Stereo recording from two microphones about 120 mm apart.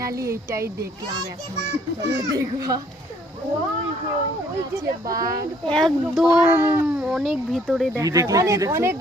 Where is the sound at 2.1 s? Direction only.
30° right (ahead or behind).